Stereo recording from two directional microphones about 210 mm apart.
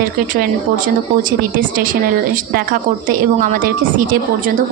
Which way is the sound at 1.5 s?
40° right (ahead or behind).